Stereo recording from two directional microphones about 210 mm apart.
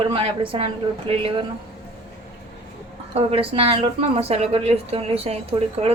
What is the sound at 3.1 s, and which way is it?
Speech, 25° right (ahead or behind).